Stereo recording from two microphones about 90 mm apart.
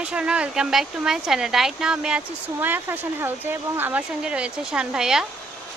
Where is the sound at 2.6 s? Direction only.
20° right (ahead or behind).